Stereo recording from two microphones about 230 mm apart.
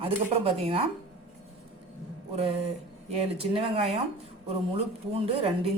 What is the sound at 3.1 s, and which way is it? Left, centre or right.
Speech, right.